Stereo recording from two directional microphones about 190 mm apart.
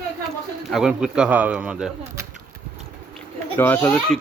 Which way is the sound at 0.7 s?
5° right (ahead or behind).